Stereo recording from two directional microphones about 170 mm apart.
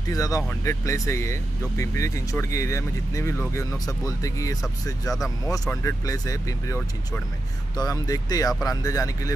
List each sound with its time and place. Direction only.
0.0 s speech: 20° left (ahead or behind)